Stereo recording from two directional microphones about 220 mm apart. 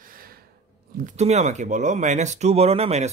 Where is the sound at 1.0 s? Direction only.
35° right (ahead or behind).